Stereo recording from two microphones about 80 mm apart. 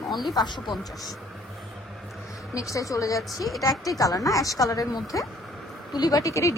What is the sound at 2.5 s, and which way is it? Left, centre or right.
A woman's voice, left.